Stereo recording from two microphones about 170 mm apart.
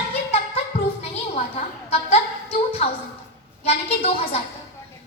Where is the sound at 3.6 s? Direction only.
35° left (ahead or behind).